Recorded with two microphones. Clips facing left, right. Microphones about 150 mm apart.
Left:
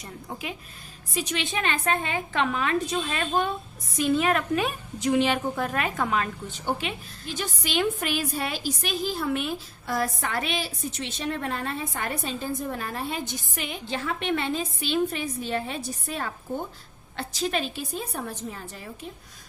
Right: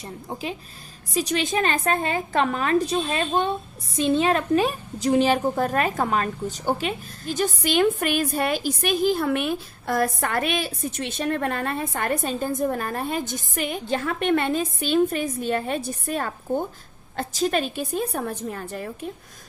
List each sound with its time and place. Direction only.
0.0 s a woman's voice: 30° right (ahead or behind); by 18.9 s 55° right (ahead or behind)